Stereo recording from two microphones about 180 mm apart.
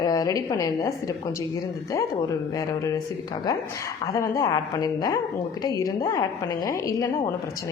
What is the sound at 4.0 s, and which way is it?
A woman's voice, 15° left (ahead or behind).